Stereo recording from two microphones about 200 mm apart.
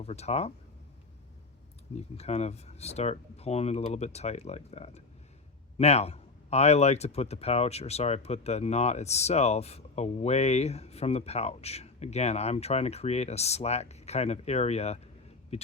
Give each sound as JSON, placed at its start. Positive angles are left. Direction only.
{"t": 0.0, "sound": "speech", "side_deg": 30}
{"t": 2.0, "sound": "speech", "side_deg": 30}